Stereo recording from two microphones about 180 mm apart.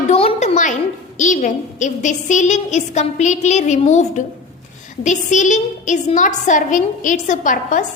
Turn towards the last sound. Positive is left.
turn(degrees=45)  # may be behind; listen again after turning